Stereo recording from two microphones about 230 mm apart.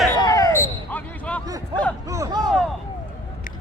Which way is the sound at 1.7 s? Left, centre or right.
Centre.